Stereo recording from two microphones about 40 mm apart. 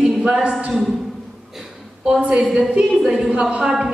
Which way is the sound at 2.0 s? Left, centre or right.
Right.